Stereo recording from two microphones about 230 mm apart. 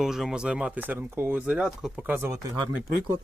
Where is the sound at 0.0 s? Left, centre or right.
Centre.